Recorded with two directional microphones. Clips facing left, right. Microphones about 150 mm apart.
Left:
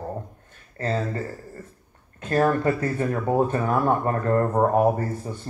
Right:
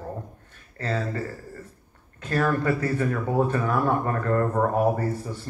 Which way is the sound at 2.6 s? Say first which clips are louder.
Left 1 dB; 40° left (ahead or behind).